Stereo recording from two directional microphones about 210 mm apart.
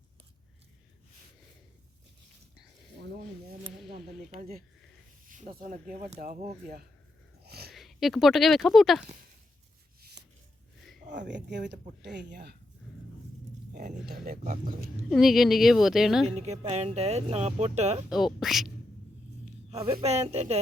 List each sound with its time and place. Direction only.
4.4 s speech: 45° right (ahead or behind)
7.4 s a sound: 50° right (ahead or behind)
7.7 s speech: centre (ahead or behind)
11.1 s speech: 55° right (ahead or behind)
14.1 s speech: 40° right (ahead or behind)
15.1 s a woman's voice: centre (ahead or behind)
16.4 s speech: 30° right (ahead or behind)
18.3 s a woman's voice: centre (ahead or behind)
19.7 s speech: 25° right (ahead or behind)